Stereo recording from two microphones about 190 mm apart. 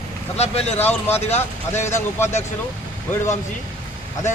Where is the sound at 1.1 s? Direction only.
35° left (ahead or behind).